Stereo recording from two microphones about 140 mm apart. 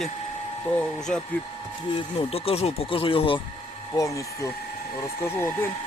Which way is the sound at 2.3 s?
45° left (ahead or behind).